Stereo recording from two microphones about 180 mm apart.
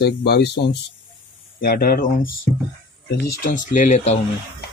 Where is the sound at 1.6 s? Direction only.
55° left (ahead or behind).